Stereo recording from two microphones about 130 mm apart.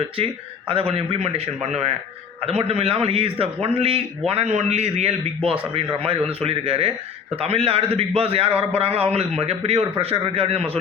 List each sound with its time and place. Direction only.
0.7 s a man's voice: 45° right (ahead or behind)